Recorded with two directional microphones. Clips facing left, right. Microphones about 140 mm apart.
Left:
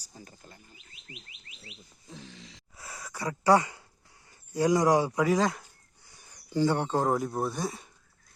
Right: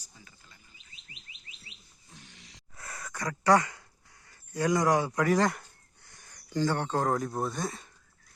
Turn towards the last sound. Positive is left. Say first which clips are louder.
# left 1 dB
turn(degrees=5)  # may be behind; listen again after turning